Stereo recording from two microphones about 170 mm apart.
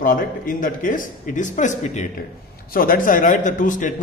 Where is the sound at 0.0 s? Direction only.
55° left (ahead or behind).